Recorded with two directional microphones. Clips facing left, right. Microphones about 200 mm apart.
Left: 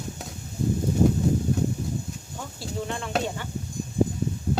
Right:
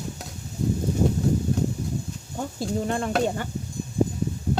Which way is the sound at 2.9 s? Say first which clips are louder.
Right 4 dB; 45° right (ahead or behind).